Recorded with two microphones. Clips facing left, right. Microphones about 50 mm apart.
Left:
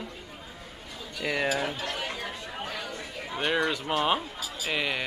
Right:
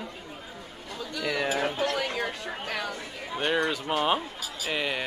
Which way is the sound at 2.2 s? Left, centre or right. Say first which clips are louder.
Right 4 dB; right.